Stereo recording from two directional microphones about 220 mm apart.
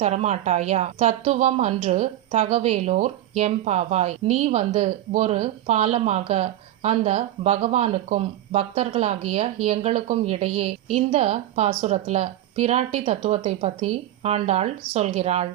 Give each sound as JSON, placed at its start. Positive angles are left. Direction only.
{"t": 0.0, "sound": "a woman's voice", "side_deg": -30}